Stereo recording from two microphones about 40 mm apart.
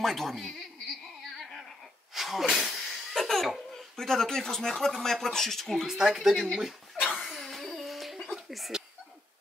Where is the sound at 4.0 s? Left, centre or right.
Centre.